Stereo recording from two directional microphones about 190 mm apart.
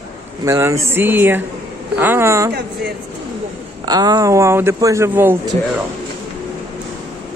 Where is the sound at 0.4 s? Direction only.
15° right (ahead or behind).